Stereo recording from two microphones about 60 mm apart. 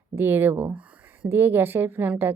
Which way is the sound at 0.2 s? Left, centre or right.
Right.